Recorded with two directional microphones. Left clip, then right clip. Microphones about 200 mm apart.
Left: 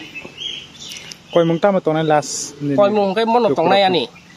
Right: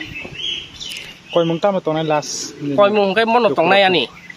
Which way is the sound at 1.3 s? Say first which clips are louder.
Left 2 dB; 45° left (ahead or behind).